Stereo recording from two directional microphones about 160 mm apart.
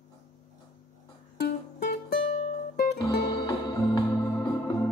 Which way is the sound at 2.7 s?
80° left.